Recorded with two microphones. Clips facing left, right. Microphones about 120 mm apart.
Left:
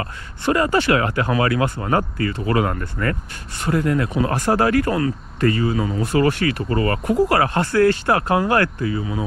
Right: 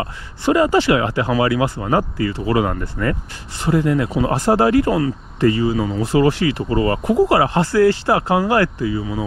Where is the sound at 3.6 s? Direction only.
25° right (ahead or behind).